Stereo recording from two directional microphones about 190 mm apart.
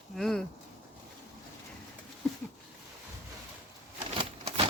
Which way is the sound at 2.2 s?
5° left (ahead or behind).